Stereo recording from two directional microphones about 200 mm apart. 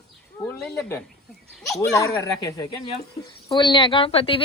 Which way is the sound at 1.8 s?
15° left (ahead or behind).